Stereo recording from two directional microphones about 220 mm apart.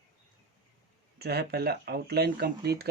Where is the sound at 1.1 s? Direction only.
45° right (ahead or behind).